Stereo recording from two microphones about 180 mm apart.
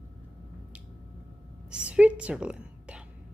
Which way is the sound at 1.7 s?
5° right (ahead or behind).